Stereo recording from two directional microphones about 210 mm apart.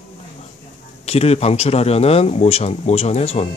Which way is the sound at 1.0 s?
30° left (ahead or behind).